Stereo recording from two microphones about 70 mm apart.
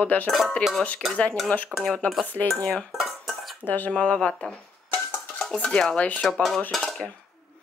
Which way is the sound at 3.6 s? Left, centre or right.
Left.